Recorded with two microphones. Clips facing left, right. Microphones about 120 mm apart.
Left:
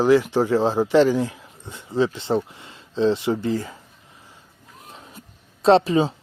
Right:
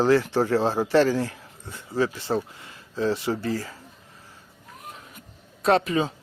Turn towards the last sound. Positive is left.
turn(degrees=30)  # may be behind; listen again after turning